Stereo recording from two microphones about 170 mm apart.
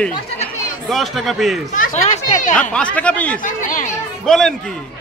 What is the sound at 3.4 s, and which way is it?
Speech, 50° left (ahead or behind).